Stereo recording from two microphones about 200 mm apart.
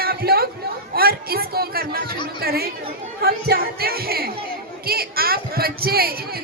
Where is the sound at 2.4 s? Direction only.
50° right (ahead or behind).